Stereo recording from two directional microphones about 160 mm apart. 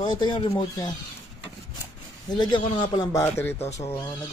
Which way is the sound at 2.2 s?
30° left (ahead or behind).